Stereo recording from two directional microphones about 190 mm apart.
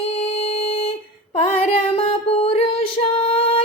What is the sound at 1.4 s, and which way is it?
Music, 30° left (ahead or behind).